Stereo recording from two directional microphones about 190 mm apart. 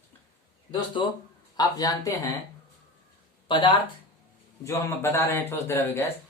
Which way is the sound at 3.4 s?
25° left (ahead or behind).